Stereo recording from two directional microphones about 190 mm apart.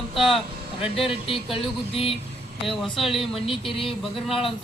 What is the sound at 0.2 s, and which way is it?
Vehicle, centre (ahead or behind).